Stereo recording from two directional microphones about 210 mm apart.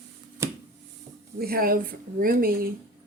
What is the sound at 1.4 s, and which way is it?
Speech, 45° right (ahead or behind).